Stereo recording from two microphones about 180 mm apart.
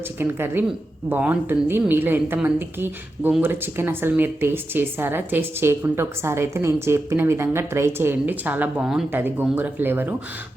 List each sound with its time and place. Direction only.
0.2 s speech: 10° right (ahead or behind)